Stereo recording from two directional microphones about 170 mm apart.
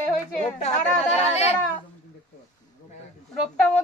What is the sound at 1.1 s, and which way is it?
Speech, 40° left (ahead or behind).